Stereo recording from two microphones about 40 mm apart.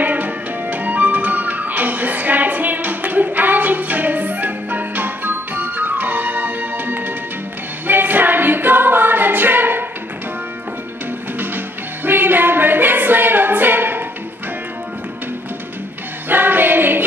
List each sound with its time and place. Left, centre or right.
0.0 s music: right
7.8 s singing: right
11.3 s music: right
16.3 s music: right